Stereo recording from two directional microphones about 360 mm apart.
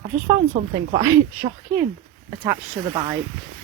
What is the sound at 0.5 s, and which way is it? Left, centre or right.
Speech, centre.